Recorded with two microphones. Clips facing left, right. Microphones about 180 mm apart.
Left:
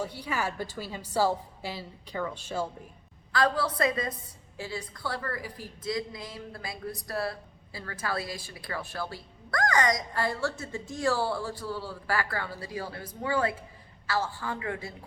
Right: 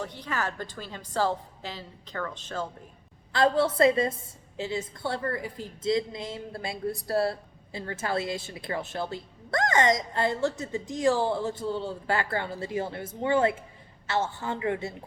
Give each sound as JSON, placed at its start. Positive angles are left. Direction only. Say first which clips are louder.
{"t": 0.0, "sound": "a woman's voice", "louder": "even", "side_deg": 10}
{"t": 3.3, "sound": "a woman's voice", "louder": "right 4 dB", "side_deg": -25}